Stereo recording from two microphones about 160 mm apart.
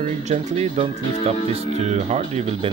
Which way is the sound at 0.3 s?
40° right (ahead or behind).